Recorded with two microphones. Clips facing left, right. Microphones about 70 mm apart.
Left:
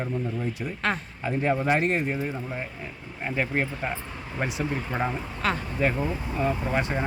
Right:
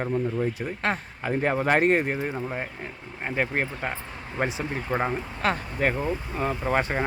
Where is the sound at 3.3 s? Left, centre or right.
Right.